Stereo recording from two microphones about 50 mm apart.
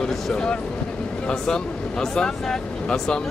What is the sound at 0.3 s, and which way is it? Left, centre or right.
Speech, centre.